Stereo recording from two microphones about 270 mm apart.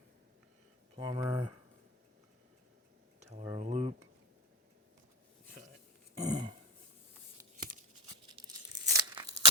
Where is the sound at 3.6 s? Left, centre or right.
Right.